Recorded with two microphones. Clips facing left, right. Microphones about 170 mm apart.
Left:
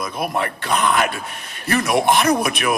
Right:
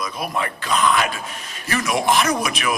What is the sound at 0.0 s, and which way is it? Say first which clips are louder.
A man's voice: left 3 dB; 55° left (ahead or behind).